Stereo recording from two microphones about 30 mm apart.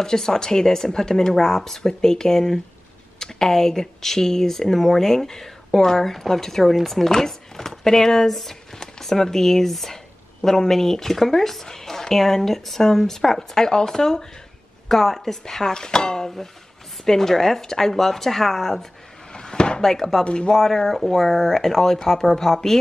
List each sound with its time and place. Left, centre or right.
0.0 s speech: centre
7.2 s chopping: centre
8.3 s speech: centre
19.3 s a sound: left
19.8 s speech: centre
20.2 s speech: left
20.5 s speech: centre